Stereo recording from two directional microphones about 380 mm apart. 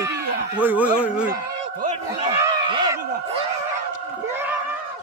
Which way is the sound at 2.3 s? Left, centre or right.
Centre.